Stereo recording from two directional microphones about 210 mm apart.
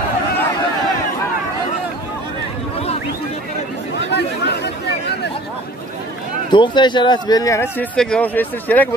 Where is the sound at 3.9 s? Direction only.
55° left (ahead or behind).